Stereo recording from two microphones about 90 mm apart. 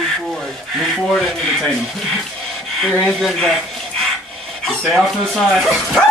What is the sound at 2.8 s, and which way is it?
Speech, 5° left (ahead or behind).